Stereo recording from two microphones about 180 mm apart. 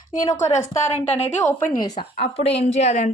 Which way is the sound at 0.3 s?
40° left (ahead or behind).